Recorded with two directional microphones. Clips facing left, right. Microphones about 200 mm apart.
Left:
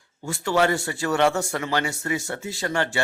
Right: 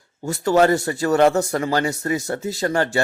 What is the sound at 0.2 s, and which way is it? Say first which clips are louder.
A man's voice: right 5 dB; 40° right (ahead or behind).